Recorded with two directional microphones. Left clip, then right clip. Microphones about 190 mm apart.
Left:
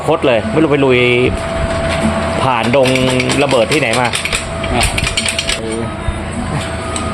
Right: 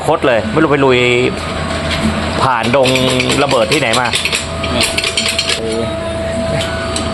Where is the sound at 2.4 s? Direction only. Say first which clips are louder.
Right 1 dB; 15° left (ahead or behind).